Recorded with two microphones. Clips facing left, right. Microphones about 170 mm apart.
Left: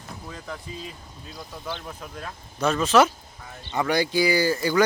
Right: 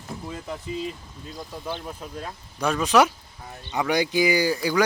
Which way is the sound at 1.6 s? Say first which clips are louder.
Right 1 dB; 15° right (ahead or behind).